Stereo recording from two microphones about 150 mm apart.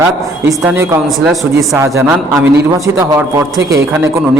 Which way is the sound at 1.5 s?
20° right (ahead or behind).